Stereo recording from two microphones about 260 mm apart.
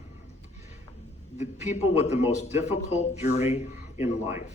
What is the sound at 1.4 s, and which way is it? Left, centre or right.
A man's voice, left.